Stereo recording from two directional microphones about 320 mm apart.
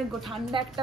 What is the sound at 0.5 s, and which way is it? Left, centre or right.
Speech, centre.